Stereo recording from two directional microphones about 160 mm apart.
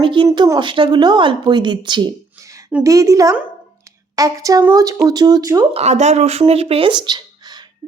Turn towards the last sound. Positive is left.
turn(degrees=-25)  # may be behind; listen again after turning